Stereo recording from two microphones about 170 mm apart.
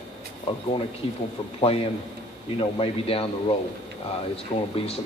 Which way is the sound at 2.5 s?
35° left (ahead or behind).